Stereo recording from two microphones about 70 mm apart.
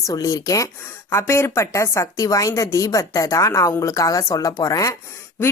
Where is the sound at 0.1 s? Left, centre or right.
Left.